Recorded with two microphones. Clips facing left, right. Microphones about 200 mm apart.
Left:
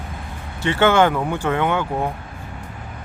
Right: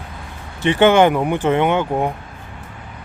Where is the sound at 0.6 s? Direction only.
15° right (ahead or behind).